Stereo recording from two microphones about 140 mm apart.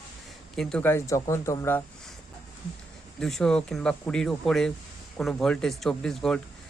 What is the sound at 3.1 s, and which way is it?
Speech, centre (ahead or behind).